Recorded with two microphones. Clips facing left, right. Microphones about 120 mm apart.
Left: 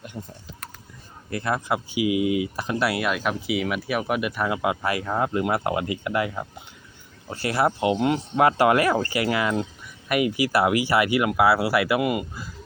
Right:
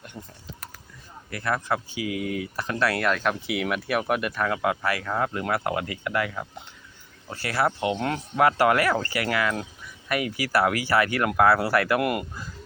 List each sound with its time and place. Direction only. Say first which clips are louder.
0.1 s speech: left 4 dB; 5° left (ahead or behind)
1.3 s speech: left 2 dB; 20° left (ahead or behind)
7.9 s speech: left 5 dB; 10° left (ahead or behind)
8.4 s speech: left 1 dB; 20° left (ahead or behind); by 12.5 s 5° left (ahead or behind)